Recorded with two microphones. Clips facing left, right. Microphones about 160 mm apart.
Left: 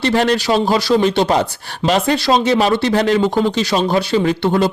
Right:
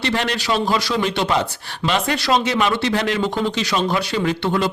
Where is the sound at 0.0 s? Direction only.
40° left (ahead or behind).